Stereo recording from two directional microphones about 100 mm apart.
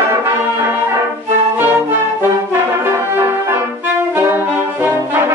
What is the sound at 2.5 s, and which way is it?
Brass instrument, 25° right (ahead or behind).